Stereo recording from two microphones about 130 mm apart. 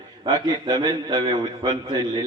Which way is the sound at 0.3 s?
30° right (ahead or behind).